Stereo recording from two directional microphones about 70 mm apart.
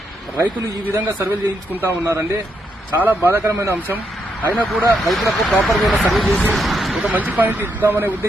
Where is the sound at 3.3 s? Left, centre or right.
Right.